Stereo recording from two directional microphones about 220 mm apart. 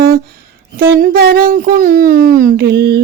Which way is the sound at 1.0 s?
45° right (ahead or behind).